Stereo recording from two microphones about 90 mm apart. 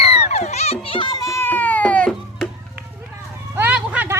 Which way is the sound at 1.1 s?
45° left (ahead or behind).